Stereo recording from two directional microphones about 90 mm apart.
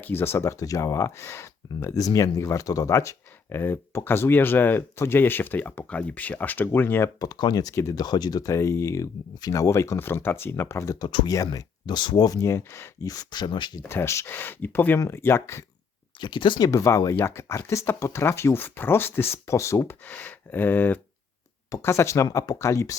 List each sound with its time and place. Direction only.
0.0 s speech: 25° left (ahead or behind)
7.2 s speech: 50° left (ahead or behind)
12.4 s speech: 30° left (ahead or behind)
13.1 s speech: 45° left (ahead or behind)
13.8 s speech: 25° left (ahead or behind)
14.9 s speech: 35° left (ahead or behind)
16.1 s speech: 60° left (ahead or behind); by 20.0 s 35° left (ahead or behind)
20.1 s speech: 20° left (ahead or behind)